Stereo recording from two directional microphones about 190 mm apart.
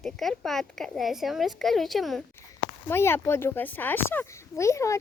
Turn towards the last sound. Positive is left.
turn(degrees=15)  # may be behind; listen again after turning